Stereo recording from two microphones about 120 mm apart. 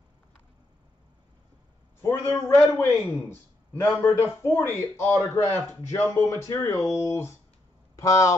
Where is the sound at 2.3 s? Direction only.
20° left (ahead or behind).